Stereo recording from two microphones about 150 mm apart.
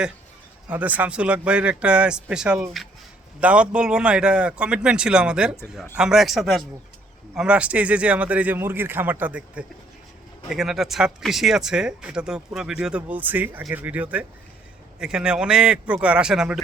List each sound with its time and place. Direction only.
0.7 s speech: 10° right (ahead or behind)